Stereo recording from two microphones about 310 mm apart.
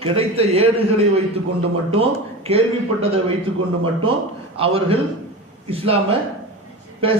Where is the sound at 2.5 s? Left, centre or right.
Centre.